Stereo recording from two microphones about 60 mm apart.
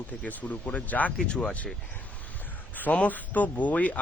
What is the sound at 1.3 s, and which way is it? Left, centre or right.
Speech, centre.